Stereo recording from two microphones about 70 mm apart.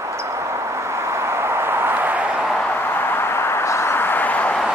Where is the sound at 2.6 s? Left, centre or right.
Left.